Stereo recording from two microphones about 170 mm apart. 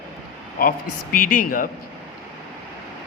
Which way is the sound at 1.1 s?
55° left (ahead or behind).